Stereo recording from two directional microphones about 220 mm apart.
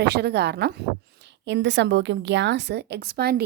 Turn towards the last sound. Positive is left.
turn(degrees=-45)  # may be behind; listen again after turning